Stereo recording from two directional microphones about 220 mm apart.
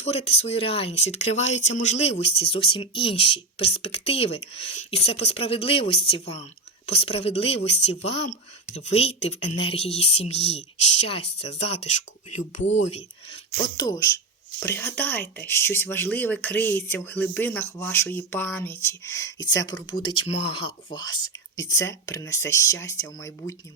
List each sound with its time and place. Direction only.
0.0 s a woman's voice: 25° left (ahead or behind)